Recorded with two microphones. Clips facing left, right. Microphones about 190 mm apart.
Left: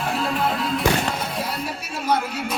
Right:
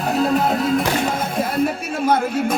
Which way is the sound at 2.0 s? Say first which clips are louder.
Right 5 dB; 50° right (ahead or behind).